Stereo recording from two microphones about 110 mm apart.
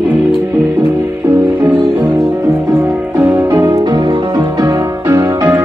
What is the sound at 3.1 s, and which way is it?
Music, 25° right (ahead or behind).